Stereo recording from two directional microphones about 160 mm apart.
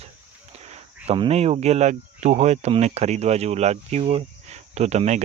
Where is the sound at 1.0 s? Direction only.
35° right (ahead or behind).